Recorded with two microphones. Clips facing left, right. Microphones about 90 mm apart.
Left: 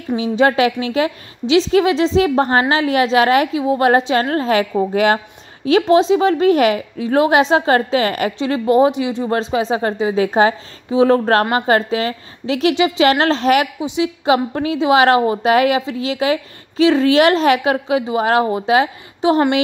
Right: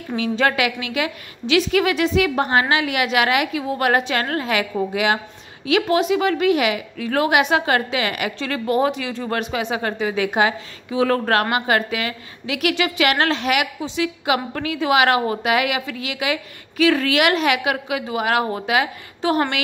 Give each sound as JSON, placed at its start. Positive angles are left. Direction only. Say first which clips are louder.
{"t": 0.1, "sound": "a woman's voice", "louder": "left 5 dB", "side_deg": 25}
{"t": 5.7, "sound": "a woman's voice", "louder": "left 6 dB", "side_deg": 30}
{"t": 7.0, "sound": "a woman's voice", "louder": "left 4 dB", "side_deg": 25}
{"t": 8.4, "sound": "a woman's voice", "louder": "left 7 dB", "side_deg": 25}
{"t": 13.7, "sound": "a woman's voice", "louder": "left 4 dB", "side_deg": 20}